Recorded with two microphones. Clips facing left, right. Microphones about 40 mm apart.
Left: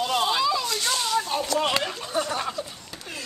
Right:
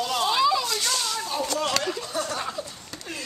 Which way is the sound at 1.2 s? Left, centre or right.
Left.